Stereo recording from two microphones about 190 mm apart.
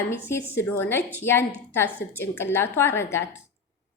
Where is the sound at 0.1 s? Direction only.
15° left (ahead or behind).